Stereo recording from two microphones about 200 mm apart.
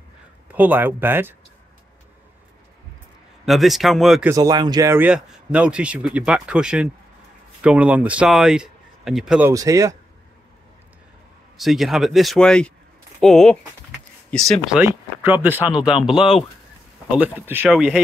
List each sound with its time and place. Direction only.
0.5 s speech: 10° right (ahead or behind)
3.4 s a man's voice: centre (ahead or behind)
4.3 s a man's voice: 20° right (ahead or behind); by 9.5 s 5° right (ahead or behind)
9.5 s speech: 15° right (ahead or behind)
11.5 s a man's voice: centre (ahead or behind)
14.8 s a man's voice: 10° right (ahead or behind)